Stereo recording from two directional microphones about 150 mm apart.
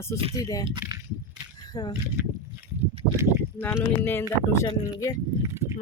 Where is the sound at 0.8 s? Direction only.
15° right (ahead or behind).